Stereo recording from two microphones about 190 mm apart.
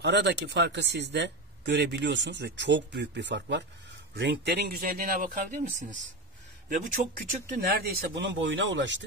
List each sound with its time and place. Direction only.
0.0 s speech: 65° right (ahead or behind); by 5.9 s 40° right (ahead or behind)
6.9 s speech: 45° right (ahead or behind)
8.5 s speech: 75° right (ahead or behind)